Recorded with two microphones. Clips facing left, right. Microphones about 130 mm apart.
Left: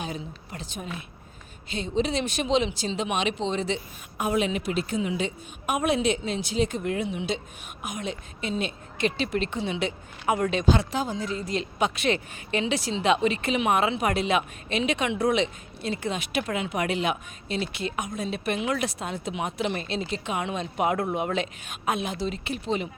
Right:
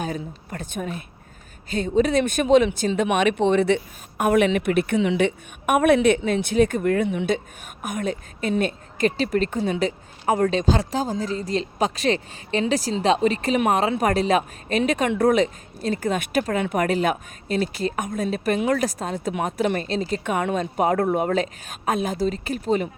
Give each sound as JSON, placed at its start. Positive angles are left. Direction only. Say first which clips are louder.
{"t": 0.0, "sound": "a woman's voice", "louder": "right 5 dB", "side_deg": -50}